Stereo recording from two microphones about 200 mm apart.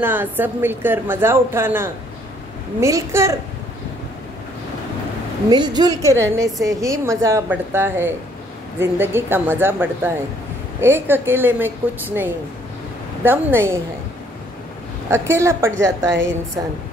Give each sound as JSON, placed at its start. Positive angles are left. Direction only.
{"t": 0.0, "sound": "a woman's voice", "side_deg": -10}
{"t": 5.5, "sound": "a woman's voice", "side_deg": -20}
{"t": 15.0, "sound": "a woman's voice", "side_deg": -10}